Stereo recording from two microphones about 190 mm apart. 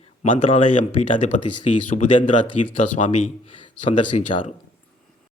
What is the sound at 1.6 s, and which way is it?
Speech, 40° left (ahead or behind).